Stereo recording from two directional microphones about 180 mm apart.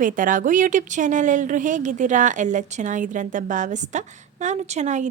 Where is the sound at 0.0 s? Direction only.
45° right (ahead or behind).